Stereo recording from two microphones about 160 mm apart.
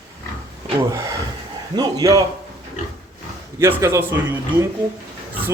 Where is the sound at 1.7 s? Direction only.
25° right (ahead or behind).